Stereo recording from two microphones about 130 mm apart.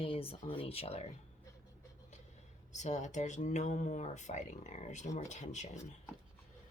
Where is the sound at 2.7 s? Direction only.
65° left (ahead or behind).